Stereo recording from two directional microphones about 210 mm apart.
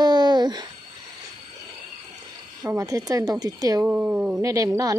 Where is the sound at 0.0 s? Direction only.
20° right (ahead or behind).